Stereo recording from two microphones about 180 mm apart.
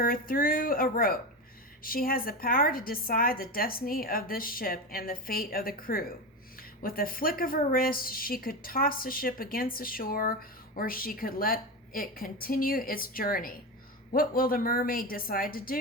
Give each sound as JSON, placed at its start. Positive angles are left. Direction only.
{"t": 0.0, "sound": "a woman's voice", "side_deg": 55}